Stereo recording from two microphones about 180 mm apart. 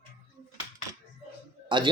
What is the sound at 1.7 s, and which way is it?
Speech, 25° right (ahead or behind).